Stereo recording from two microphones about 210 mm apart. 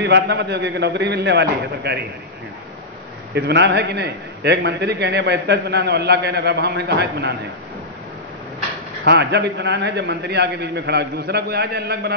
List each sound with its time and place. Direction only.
0.0 s a man's voice: 55° right (ahead or behind)
3.3 s a man's voice: 55° right (ahead or behind)
9.0 s a man's voice: 55° right (ahead or behind)